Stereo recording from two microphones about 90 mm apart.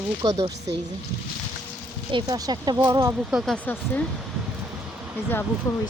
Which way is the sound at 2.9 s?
35° right (ahead or behind).